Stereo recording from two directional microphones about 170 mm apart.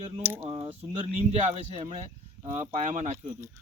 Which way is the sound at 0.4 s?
30° right (ahead or behind).